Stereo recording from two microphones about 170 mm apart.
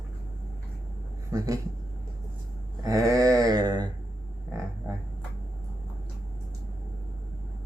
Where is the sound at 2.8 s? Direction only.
20° right (ahead or behind).